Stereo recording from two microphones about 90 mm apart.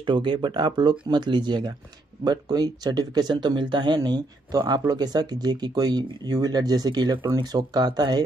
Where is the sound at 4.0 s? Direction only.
45° right (ahead or behind).